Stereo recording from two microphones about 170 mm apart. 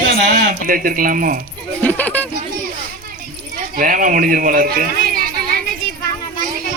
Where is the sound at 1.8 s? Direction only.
10° left (ahead or behind).